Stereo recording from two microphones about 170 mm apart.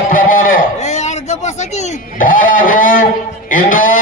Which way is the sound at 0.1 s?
55° left (ahead or behind).